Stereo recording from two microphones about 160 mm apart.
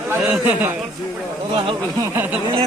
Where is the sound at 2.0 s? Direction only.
15° right (ahead or behind).